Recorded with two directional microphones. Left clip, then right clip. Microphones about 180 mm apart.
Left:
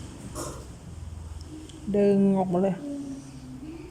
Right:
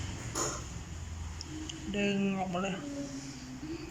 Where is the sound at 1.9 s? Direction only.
40° left (ahead or behind).